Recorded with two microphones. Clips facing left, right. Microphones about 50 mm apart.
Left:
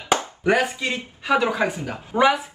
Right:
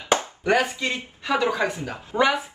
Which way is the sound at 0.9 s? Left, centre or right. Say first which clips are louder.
Left 3 dB; left.